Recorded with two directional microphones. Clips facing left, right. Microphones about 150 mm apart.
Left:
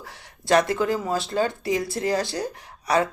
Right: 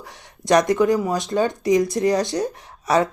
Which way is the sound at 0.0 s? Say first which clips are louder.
Right 3 dB; 20° right (ahead or behind).